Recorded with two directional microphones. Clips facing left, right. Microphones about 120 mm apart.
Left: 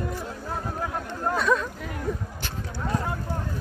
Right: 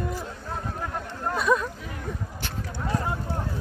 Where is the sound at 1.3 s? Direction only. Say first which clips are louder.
Right 1 dB; 10° right (ahead or behind).